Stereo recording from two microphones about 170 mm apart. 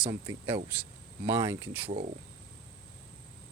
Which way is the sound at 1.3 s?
20° right (ahead or behind).